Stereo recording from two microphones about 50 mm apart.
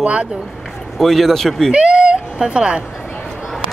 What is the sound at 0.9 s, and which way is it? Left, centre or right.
Speech, centre.